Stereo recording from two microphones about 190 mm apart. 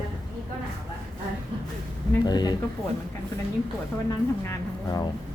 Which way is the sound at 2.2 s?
20° left (ahead or behind).